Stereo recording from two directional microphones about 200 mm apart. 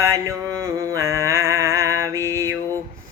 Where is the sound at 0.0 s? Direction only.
15° right (ahead or behind).